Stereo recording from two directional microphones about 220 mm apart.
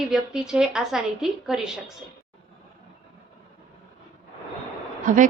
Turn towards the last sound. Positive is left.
turn(degrees=-35)  # may be behind; listen again after turning